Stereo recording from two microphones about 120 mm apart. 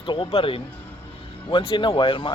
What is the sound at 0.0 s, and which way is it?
Speech, 45° left (ahead or behind).